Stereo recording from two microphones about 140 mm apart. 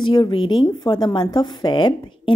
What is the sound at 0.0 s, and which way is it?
A woman's voice, 35° left (ahead or behind).